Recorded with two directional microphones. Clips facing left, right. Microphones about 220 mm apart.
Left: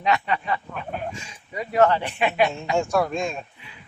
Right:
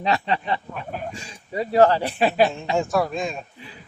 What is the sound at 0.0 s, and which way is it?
Speech, 30° right (ahead or behind).